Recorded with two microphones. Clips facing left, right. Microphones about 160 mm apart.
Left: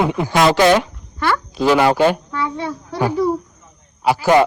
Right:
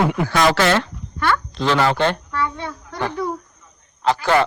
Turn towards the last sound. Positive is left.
turn(degrees=15)  # may be behind; listen again after turning